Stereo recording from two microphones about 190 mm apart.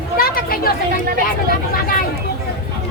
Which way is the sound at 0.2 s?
50° left (ahead or behind).